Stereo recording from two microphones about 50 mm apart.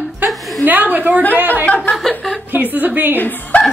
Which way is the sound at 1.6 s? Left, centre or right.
Left.